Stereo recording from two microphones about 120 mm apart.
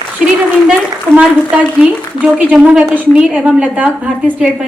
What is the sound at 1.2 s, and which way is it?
A woman's voice, 10° right (ahead or behind).